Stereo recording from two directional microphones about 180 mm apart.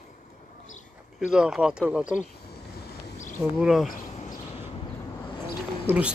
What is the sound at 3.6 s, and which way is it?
Speech, centre (ahead or behind).